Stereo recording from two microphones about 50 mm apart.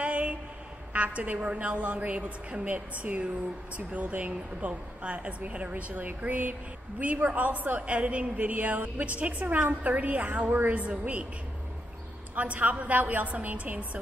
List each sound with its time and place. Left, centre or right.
0.0 s a sound: right
0.9 s a woman's voice: right
12.4 s a woman's voice: right